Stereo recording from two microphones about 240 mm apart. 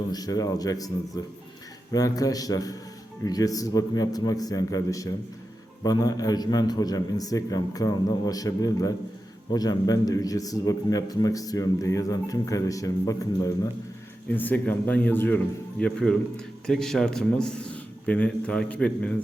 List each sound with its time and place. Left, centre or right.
0.1 s a man's voice: centre